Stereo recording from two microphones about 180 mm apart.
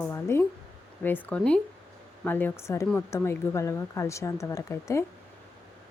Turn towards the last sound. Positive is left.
turn(degrees=15)  # may be behind; listen again after turning